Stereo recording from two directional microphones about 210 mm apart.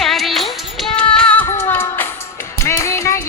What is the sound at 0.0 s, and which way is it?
Music, centre (ahead or behind).